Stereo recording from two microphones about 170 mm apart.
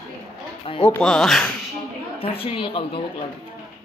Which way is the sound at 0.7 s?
30° left (ahead or behind).